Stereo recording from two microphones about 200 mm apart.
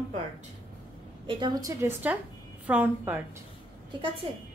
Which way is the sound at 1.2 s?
20° right (ahead or behind).